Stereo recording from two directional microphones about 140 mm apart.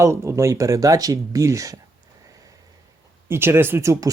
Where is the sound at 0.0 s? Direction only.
20° right (ahead or behind).